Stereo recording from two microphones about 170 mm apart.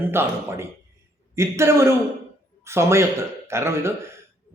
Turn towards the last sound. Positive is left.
turn(degrees=-15)  # may be behind; listen again after turning